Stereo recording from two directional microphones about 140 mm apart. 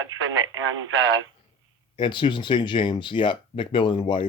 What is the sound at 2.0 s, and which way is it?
Speech, 35° left (ahead or behind).